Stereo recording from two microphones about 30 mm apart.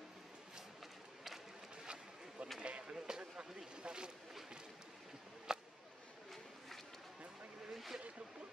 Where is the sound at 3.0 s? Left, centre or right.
Right.